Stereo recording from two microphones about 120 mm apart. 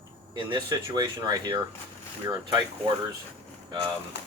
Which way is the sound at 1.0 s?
35° right (ahead or behind).